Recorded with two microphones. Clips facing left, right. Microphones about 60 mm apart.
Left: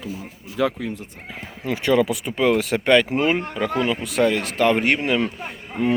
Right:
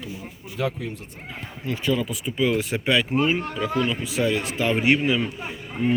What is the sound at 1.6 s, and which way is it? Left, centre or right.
Speech, left.